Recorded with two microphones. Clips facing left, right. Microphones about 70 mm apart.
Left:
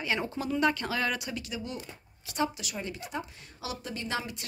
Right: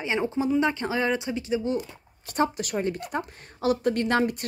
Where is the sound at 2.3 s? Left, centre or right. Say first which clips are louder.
Right 6 dB; right.